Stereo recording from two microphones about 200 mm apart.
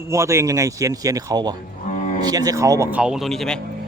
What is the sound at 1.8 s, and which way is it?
Cattle, 35° left (ahead or behind).